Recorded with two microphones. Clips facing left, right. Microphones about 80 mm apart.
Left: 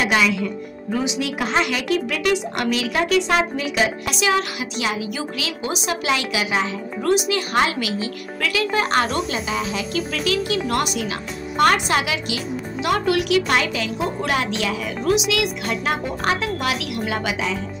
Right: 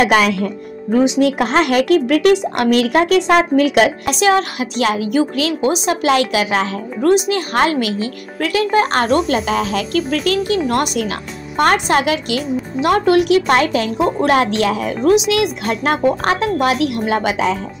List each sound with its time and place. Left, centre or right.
0.0 s speech: right
0.9 s speech: right
7.1 s speech: right